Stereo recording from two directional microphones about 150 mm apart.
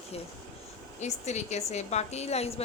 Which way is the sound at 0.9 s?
50° left (ahead or behind).